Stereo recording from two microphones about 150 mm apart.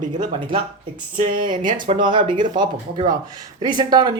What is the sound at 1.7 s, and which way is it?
Speech, 35° right (ahead or behind).